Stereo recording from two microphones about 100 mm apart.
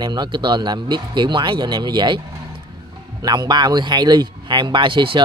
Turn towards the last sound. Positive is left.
turn(degrees=-55)  # may be behind; listen again after turning